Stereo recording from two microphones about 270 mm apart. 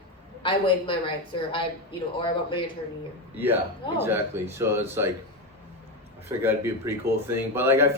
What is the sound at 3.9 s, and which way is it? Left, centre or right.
Speech, centre.